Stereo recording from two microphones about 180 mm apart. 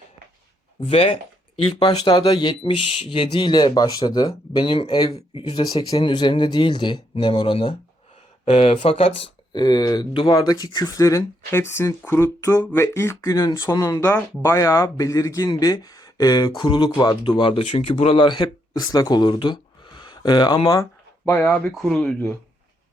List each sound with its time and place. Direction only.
0.8 s speech: 30° left (ahead or behind)
9.5 s speech: 20° left (ahead or behind)
21.2 s speech: 10° left (ahead or behind)